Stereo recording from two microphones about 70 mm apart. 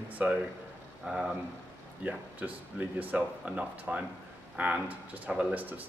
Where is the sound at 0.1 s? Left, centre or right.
Right.